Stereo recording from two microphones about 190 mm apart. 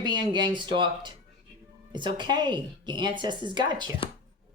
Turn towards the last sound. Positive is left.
turn(degrees=-25)  # may be behind; listen again after turning